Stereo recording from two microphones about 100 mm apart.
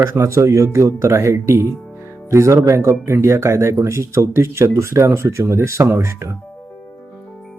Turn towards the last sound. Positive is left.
turn(degrees=-25)  # may be behind; listen again after turning